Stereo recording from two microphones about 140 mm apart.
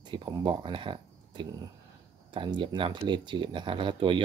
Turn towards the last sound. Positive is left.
turn(degrees=-35)  # may be behind; listen again after turning